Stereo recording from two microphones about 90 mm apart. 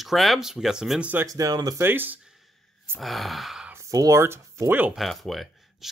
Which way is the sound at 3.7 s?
35° right (ahead or behind).